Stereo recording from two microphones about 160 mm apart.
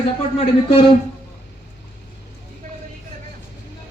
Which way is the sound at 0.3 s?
35° left (ahead or behind).